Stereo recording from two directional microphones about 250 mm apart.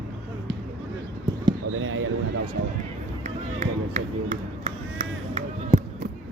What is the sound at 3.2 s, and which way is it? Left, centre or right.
Run, right.